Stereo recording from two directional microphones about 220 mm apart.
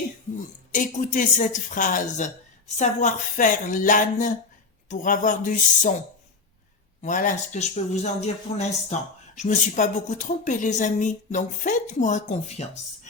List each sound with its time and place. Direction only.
0.7 s a man's voice: 35° left (ahead or behind)
7.0 s a man's voice: 35° left (ahead or behind)